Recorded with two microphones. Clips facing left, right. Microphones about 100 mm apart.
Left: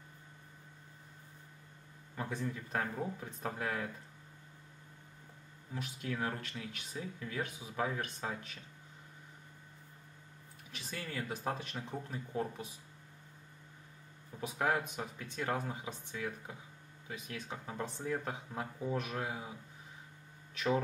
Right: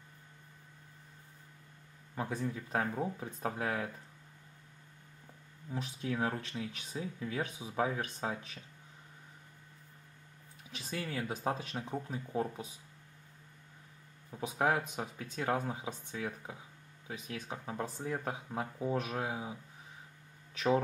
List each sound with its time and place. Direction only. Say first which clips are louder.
2.1 s speech: right 2 dB; 15° right (ahead or behind)
5.7 s speech: right 3 dB; 25° right (ahead or behind)
10.9 s speech: right 3 dB; 10° right (ahead or behind)
14.3 s speech: right 2 dB; 10° right (ahead or behind)
17.3 s speech: right 3 dB; 15° right (ahead or behind)